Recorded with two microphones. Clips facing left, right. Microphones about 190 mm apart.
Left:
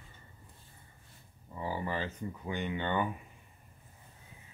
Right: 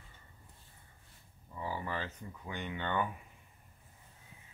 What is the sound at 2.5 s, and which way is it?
Speech, 5° left (ahead or behind).